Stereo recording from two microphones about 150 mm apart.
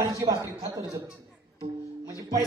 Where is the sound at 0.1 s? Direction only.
20° right (ahead or behind).